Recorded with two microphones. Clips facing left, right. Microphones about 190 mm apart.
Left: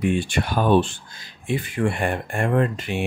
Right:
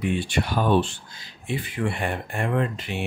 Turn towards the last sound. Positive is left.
turn(degrees=50)  # may be behind; listen again after turning